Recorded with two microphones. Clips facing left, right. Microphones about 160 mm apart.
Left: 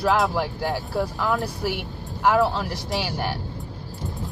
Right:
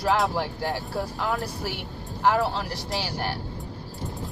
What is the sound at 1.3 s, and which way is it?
Speech, centre (ahead or behind).